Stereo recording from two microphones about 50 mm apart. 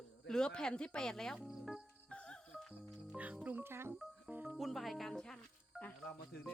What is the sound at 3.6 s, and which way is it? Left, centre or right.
Speech, right.